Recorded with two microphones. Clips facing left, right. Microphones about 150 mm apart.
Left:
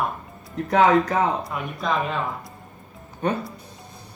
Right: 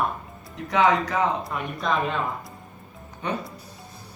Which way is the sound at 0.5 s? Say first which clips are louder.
Left 4 dB; 50° left (ahead or behind).